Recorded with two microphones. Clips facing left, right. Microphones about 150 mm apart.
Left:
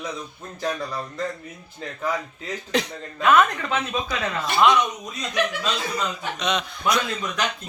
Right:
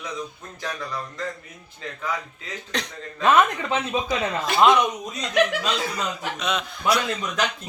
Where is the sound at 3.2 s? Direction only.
30° right (ahead or behind).